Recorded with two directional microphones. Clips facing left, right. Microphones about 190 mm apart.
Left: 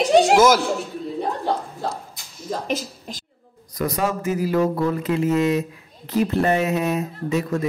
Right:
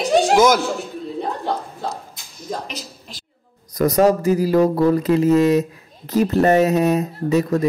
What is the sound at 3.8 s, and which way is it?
Speech, 40° right (ahead or behind).